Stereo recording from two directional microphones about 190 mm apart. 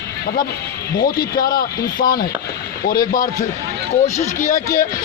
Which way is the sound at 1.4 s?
50° left (ahead or behind).